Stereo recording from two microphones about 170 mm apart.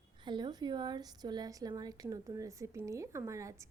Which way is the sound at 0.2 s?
25° right (ahead or behind).